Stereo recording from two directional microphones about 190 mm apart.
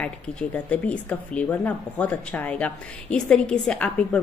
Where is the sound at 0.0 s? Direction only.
5° left (ahead or behind).